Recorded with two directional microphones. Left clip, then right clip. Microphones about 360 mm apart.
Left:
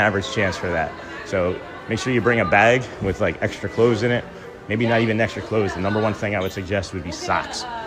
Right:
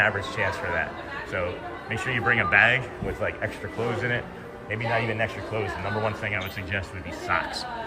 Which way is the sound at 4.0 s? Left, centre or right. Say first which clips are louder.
Left 6 dB; centre.